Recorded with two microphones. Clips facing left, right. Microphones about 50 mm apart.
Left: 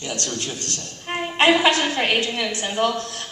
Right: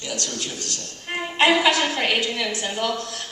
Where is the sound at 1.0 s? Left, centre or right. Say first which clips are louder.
Left 2 dB; left.